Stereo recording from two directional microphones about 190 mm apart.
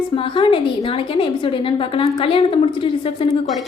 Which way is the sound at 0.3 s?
25° left (ahead or behind).